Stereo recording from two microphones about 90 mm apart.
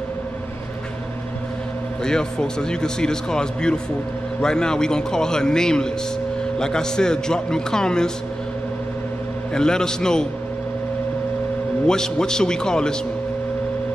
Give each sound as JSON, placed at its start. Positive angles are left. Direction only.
{"t": 2.0, "sound": "a man's voice", "side_deg": 10}
{"t": 9.5, "sound": "a man's voice", "side_deg": 10}
{"t": 11.9, "sound": "a man's voice", "side_deg": 5}